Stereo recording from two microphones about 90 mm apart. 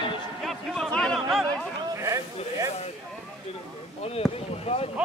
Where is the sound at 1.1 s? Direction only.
5° right (ahead or behind).